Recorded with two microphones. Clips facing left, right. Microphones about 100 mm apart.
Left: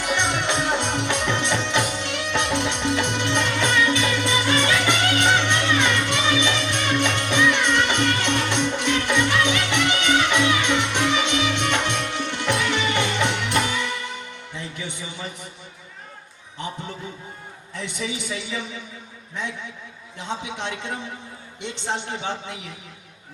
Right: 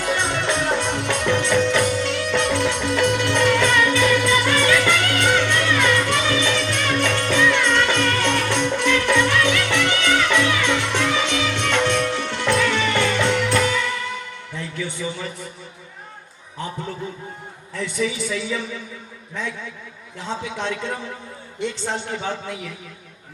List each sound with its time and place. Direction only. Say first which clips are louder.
0.0 s music: right 1 dB; 20° left (ahead or behind)
15.1 s a man's voice: right 3 dB; 20° left (ahead or behind)
17.7 s a man's voice: right 6 dB; 20° left (ahead or behind)
20.1 s a man's voice: right 2 dB; 20° left (ahead or behind)